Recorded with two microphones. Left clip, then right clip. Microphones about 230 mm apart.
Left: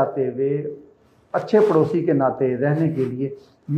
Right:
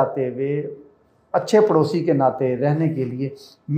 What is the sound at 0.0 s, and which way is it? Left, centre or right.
Speech, right.